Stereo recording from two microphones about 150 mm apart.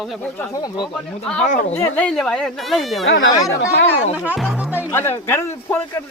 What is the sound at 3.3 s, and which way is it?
Speech, 25° left (ahead or behind).